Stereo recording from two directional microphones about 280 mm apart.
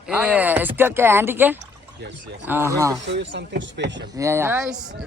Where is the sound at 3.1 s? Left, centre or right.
Right.